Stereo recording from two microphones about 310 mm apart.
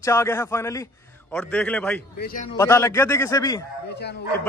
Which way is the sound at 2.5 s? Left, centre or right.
Centre.